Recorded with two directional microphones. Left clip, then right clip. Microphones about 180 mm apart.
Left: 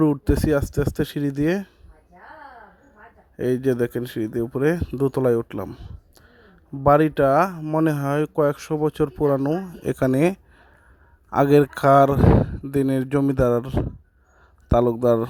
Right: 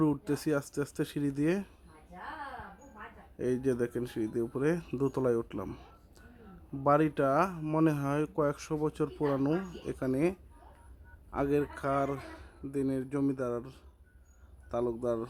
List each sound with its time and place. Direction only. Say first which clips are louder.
0.0 s speech: left 10 dB; 40° left (ahead or behind)
3.3 s speech: left 10 dB; 40° left (ahead or behind)
5.6 s speech: left 7 dB; 25° left (ahead or behind)
6.8 s speech: left 10 dB; 40° left (ahead or behind)
7.6 s speech: left 8 dB; 25° left (ahead or behind)
7.9 s speech: left 8 dB; 40° left (ahead or behind)
9.4 s speech: left 7 dB; 25° left (ahead or behind)
9.8 s speech: left 13 dB; 50° left (ahead or behind)